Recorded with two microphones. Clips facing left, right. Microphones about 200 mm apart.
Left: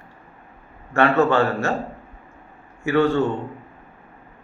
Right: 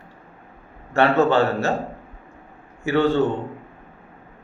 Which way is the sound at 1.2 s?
20° right (ahead or behind).